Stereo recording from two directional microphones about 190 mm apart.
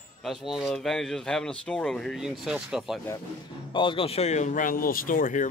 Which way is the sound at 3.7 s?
25° left (ahead or behind).